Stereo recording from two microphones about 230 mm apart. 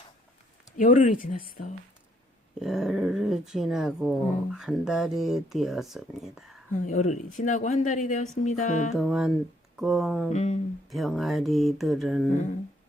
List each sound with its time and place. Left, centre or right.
0.8 s speech: left
2.6 s speech: centre
6.8 s speech: left
8.9 s speech: centre
10.3 s a sound: left
10.8 s speech: centre